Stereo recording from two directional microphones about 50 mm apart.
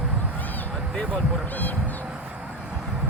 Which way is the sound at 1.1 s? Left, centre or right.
Left.